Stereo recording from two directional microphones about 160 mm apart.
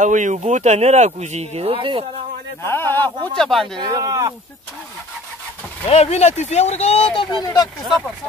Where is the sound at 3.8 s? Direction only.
20° right (ahead or behind).